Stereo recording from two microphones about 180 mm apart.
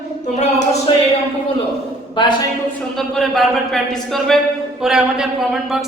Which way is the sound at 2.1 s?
25° left (ahead or behind).